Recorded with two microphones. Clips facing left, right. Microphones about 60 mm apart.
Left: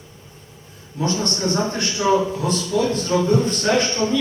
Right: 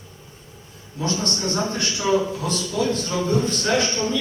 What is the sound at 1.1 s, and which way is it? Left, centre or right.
A man's voice, left.